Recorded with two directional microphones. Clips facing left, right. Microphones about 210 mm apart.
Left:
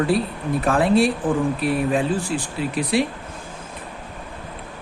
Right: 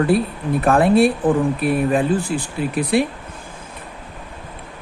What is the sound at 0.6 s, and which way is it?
Speech, 55° right (ahead or behind).